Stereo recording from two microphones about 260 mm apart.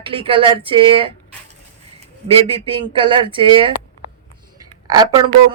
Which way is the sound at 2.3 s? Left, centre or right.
Right.